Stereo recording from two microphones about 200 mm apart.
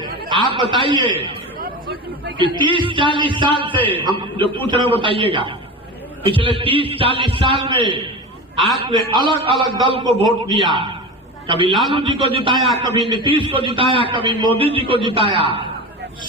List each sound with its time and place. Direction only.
0.3 s a man's voice: 25° right (ahead or behind)
1.6 s speech: 50° right (ahead or behind)
2.3 s a man's voice: 25° right (ahead or behind)
8.5 s a man's voice: centre (ahead or behind)
8.8 s a man's voice: 20° right (ahead or behind)
10.2 s a man's voice: centre (ahead or behind)
10.7 s a man's voice: 25° right (ahead or behind)